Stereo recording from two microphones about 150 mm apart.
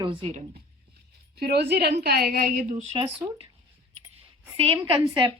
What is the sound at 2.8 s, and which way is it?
Speech, 35° right (ahead or behind).